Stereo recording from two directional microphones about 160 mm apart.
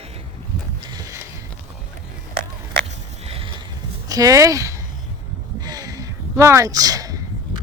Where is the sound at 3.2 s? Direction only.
35° right (ahead or behind).